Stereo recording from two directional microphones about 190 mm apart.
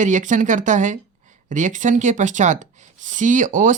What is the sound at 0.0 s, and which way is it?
Speech, 40° right (ahead or behind).